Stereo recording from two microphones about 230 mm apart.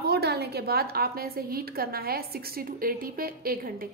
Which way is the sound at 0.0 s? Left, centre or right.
Right.